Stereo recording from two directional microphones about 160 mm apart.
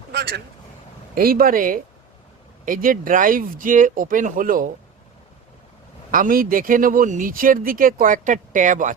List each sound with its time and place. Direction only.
0.1 s vehicle: 90° right
1.1 s speech: 65° right (ahead or behind)
6.1 s speech: 60° right (ahead or behind)